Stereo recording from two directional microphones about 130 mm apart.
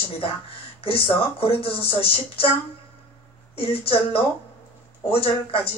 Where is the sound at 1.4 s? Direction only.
45° left (ahead or behind).